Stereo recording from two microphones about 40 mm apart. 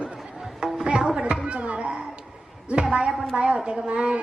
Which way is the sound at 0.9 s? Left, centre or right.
Right.